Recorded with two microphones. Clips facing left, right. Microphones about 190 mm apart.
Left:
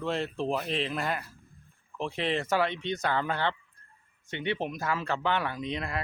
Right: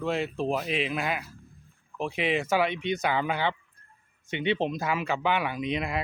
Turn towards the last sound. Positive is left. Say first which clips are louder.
# right 4 dB
turn(degrees=-15)  # may be behind; listen again after turning